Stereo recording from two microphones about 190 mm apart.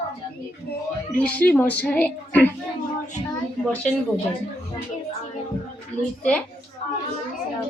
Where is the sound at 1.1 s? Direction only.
10° left (ahead or behind).